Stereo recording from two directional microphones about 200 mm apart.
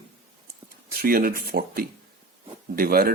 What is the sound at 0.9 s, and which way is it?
A man's voice, 50° right (ahead or behind).